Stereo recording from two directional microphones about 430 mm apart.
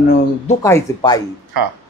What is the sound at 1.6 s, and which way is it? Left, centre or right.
Speech, right.